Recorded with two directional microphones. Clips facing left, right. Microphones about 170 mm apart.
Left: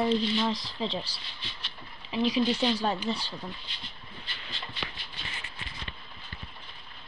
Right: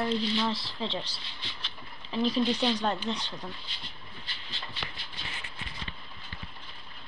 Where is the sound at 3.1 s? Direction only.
15° right (ahead or behind).